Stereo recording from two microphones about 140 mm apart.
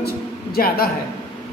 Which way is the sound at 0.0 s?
90° left.